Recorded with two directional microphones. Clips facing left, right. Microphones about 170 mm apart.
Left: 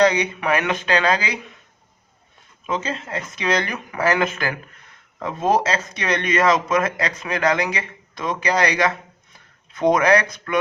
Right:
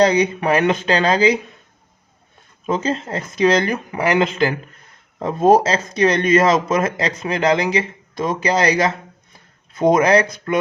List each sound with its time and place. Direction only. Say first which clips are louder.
0.0 s speech: right 3 dB; 35° right (ahead or behind)
2.6 s speech: right 5 dB; 35° right (ahead or behind)
3.9 s speech: right 2 dB; 20° right (ahead or behind)
5.2 s speech: right 6 dB; 35° right (ahead or behind)
9.9 s speech: right 3 dB; 25° right (ahead or behind)